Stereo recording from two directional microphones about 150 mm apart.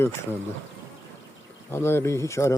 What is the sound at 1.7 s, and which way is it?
Speech, 15° left (ahead or behind).